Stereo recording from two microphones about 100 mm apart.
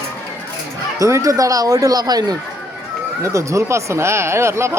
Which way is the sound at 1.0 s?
30° right (ahead or behind).